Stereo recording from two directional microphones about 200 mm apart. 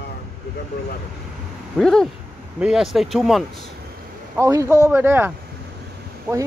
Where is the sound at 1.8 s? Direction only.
5° left (ahead or behind).